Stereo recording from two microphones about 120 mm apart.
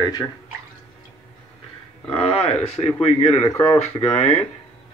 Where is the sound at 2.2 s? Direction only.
50° left (ahead or behind).